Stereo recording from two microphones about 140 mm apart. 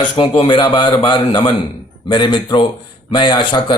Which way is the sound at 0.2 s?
35° left (ahead or behind).